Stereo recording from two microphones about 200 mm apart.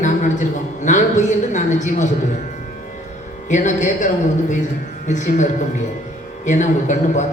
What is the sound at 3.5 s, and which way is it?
A man's voice, 40° left (ahead or behind).